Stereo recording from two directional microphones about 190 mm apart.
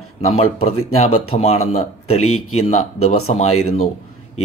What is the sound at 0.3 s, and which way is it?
Speech, 30° left (ahead or behind).